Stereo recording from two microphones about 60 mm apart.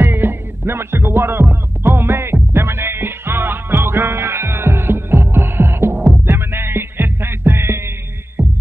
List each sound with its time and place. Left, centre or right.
0.0 s music: right